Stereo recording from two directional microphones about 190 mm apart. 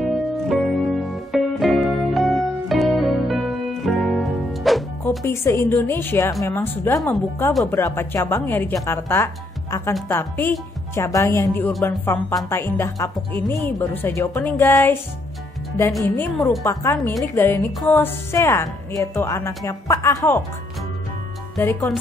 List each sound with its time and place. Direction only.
0.0 s music: centre (ahead or behind)
5.2 s a woman's voice: 15° left (ahead or behind)
16.0 s a woman's voice: 10° left (ahead or behind)
21.5 s a woman's voice: 15° left (ahead or behind)